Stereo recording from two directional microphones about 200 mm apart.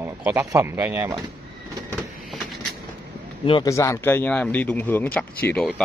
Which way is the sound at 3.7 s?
15° left (ahead or behind).